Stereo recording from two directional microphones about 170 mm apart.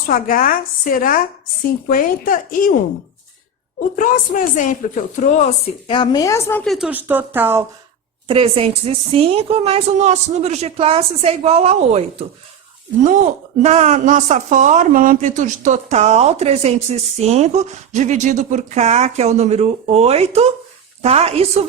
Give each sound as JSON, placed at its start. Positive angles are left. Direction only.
{"t": 0.1, "sound": "speech", "side_deg": 55}
{"t": 3.9, "sound": "speech", "side_deg": 50}
{"t": 5.9, "sound": "a woman's voice", "side_deg": 30}
{"t": 6.7, "sound": "speech", "side_deg": -5}
{"t": 8.3, "sound": "a woman's voice", "side_deg": -35}
{"t": 13.6, "sound": "a woman's voice", "side_deg": -40}